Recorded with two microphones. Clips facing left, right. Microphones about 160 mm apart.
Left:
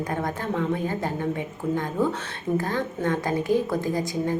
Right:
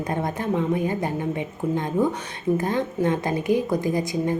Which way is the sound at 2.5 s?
20° right (ahead or behind).